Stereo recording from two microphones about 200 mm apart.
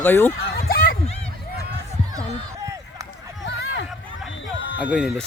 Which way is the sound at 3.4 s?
65° left (ahead or behind).